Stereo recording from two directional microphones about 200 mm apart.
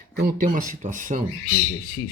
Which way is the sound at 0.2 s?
45° right (ahead or behind).